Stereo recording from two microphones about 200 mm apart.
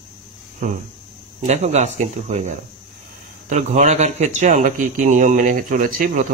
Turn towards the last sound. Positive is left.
turn(degrees=-40)  # may be behind; listen again after turning